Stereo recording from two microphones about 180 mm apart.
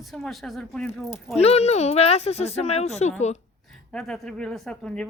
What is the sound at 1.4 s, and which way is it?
Speech, 35° left (ahead or behind).